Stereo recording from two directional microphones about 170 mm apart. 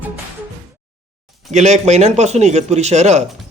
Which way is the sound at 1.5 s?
45° right (ahead or behind).